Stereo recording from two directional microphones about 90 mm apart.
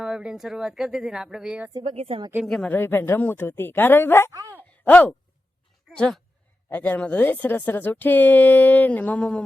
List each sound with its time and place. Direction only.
0.0 s speech: 10° right (ahead or behind)
1.8 s a woman's voice: 90° right
2.6 s speech: 20° left (ahead or behind)
6.7 s speech: 20° left (ahead or behind)